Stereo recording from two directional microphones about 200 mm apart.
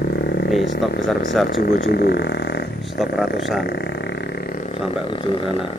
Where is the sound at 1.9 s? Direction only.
55° left (ahead or behind).